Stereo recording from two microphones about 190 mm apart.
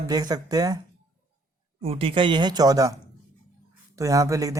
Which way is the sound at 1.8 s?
30° right (ahead or behind).